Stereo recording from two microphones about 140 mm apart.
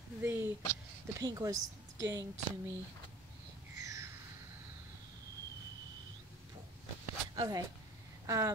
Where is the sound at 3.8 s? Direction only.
20° right (ahead or behind).